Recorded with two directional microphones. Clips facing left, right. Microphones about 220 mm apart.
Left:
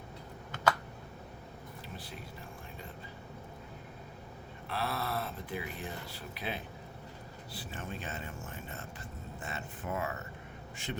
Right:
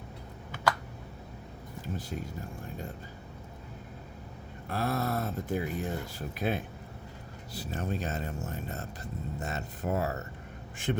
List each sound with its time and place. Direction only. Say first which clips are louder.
2.0 s speech: right 8 dB; 45° right (ahead or behind)
4.7 s speech: right 5 dB; 45° right (ahead or behind)
10.9 s a man's voice: right 6 dB; 55° right (ahead or behind)